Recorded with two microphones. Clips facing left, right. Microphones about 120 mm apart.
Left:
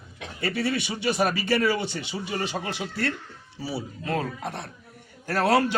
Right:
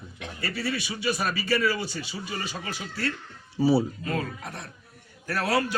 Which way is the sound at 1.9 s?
65° left (ahead or behind).